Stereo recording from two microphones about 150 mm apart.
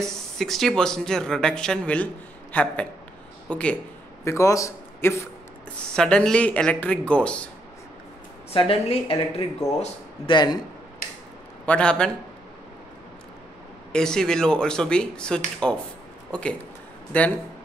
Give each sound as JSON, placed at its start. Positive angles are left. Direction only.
{"t": 0.0, "sound": "speech", "side_deg": 0}
{"t": 4.2, "sound": "a man's voice", "side_deg": 20}
{"t": 5.8, "sound": "speech", "side_deg": 5}
{"t": 8.5, "sound": "speech", "side_deg": 40}
{"t": 10.3, "sound": "a man's voice", "side_deg": 30}
{"t": 11.6, "sound": "speech", "side_deg": 5}
{"t": 13.9, "sound": "speech", "side_deg": 5}